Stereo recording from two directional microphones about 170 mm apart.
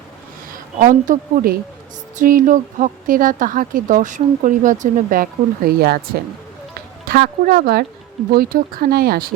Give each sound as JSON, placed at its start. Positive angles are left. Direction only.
{"t": 0.8, "sound": "a woman's voice", "side_deg": -50}
{"t": 7.1, "sound": "speech", "side_deg": -60}